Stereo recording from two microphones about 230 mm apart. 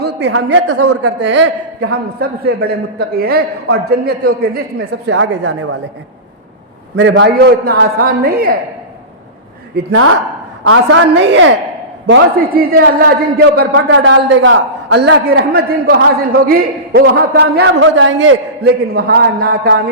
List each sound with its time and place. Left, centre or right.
0.0 s speech: right
0.8 s speech: right
1.2 s a man's voice: right
5.0 s a man's voice: right
6.9 s a man's voice: right
10.6 s a woman's voice: right